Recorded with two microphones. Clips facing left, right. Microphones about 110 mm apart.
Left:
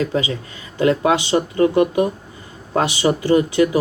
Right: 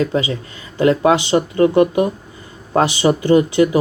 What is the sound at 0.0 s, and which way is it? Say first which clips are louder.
Speech: right 2 dB; 35° right (ahead or behind).